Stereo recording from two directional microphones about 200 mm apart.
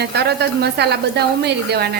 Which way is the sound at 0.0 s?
55° right (ahead or behind).